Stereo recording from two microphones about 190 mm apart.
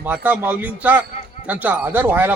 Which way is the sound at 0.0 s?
10° right (ahead or behind).